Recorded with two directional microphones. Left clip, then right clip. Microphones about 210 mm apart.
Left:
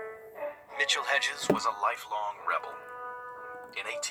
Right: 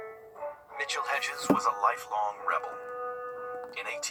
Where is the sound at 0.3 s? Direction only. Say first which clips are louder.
Left 4 dB; 50° left (ahead or behind).